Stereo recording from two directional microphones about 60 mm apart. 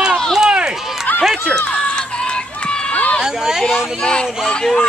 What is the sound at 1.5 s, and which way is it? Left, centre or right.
Run, centre.